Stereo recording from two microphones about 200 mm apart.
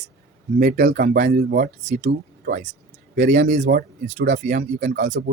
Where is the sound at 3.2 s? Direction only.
40° right (ahead or behind).